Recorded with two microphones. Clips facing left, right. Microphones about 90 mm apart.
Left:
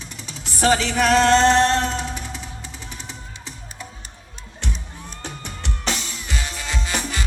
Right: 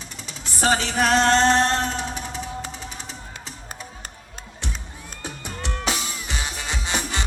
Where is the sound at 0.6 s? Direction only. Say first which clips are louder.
Left 2 dB; 35° right (ahead or behind).